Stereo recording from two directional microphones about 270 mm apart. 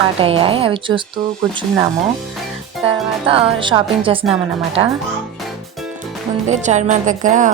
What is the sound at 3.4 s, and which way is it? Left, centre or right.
Speech, centre.